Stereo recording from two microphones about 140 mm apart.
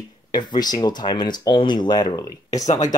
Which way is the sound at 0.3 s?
30° left (ahead or behind).